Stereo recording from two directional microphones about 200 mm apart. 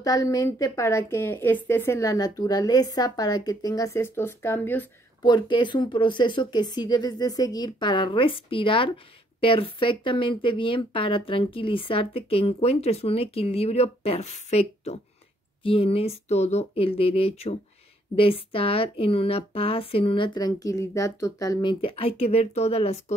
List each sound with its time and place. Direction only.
0.0 s a woman's voice: 15° left (ahead or behind)
5.2 s speech: 20° left (ahead or behind)